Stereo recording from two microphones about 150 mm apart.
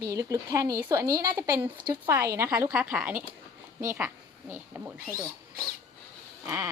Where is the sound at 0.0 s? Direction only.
25° right (ahead or behind).